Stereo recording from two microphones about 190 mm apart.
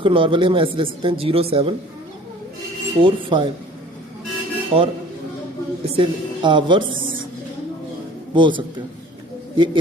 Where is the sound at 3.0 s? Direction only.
25° right (ahead or behind).